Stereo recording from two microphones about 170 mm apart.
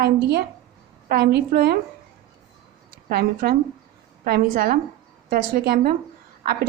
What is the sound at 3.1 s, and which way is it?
A woman's voice, 65° right (ahead or behind).